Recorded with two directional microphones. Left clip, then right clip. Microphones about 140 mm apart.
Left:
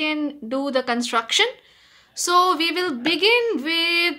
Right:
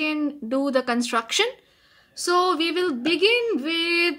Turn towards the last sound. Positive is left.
turn(degrees=-10)  # may be behind; listen again after turning